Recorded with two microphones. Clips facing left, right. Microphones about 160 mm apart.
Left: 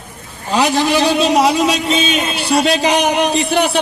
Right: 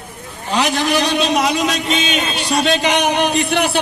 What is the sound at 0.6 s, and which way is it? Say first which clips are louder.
Speech: left 3 dB; 30° left (ahead or behind).